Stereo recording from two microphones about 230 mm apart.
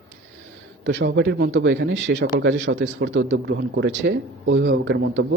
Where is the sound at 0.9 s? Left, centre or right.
Right.